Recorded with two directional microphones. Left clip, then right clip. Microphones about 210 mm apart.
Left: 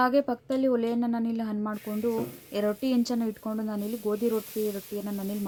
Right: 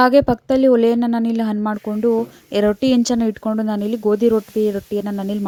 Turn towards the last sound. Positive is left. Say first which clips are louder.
# right 12 dB
turn(degrees=-40)  # may be behind; listen again after turning